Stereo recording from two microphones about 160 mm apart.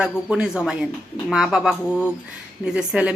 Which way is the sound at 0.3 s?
5° right (ahead or behind).